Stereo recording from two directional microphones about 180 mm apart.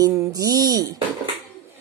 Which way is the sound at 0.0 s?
20° right (ahead or behind).